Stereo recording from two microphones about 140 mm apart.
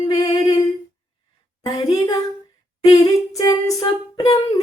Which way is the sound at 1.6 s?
30° left (ahead or behind).